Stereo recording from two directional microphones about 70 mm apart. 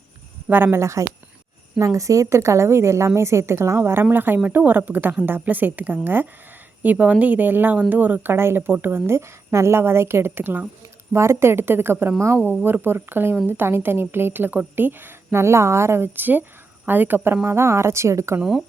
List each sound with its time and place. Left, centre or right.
0.4 s speech: right
0.8 s a woman's voice: right
11.1 s a woman's voice: right